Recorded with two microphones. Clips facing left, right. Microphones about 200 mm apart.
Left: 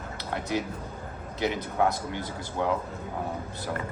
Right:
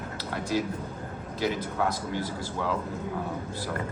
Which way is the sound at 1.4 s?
20° left (ahead or behind).